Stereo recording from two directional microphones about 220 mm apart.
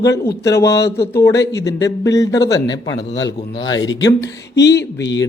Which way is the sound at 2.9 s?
55° left (ahead or behind).